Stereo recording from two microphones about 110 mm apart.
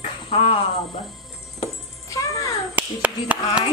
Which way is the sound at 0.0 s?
60° left (ahead or behind).